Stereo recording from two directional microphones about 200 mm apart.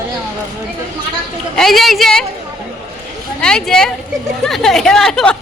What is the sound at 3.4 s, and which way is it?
A woman's voice, 5° left (ahead or behind).